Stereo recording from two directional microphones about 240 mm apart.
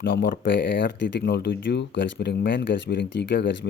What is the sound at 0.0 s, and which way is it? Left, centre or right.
Speech, left.